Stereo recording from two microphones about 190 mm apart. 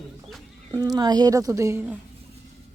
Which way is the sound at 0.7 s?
20° right (ahead or behind).